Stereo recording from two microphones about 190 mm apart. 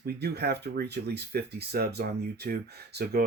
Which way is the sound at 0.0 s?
60° right (ahead or behind).